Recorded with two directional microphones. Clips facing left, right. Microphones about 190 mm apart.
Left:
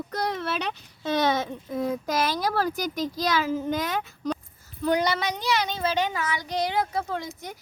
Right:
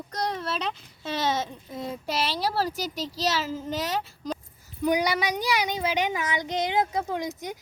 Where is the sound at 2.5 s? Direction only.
30° right (ahead or behind).